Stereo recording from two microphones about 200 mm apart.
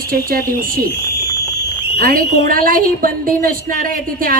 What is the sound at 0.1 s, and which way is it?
Speech, 45° right (ahead or behind).